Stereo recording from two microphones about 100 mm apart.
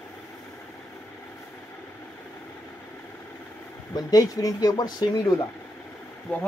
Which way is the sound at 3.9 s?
40° left (ahead or behind).